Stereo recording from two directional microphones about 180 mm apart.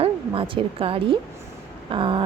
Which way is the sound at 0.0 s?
30° right (ahead or behind).